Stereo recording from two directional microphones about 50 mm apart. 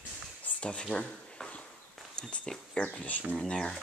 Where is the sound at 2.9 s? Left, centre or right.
Left.